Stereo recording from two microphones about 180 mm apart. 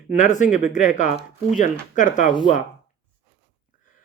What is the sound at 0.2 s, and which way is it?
Speech, 45° left (ahead or behind).